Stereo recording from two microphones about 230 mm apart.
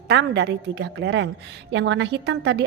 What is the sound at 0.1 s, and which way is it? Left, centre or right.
A woman's voice, right.